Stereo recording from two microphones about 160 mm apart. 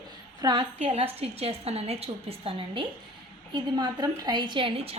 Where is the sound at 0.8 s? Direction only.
40° right (ahead or behind).